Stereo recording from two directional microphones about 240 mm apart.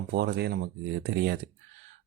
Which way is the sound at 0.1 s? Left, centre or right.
Right.